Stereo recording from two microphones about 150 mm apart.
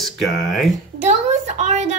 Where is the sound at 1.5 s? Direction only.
50° right (ahead or behind).